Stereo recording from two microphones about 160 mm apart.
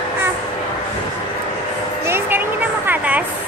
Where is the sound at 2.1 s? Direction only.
10° right (ahead or behind).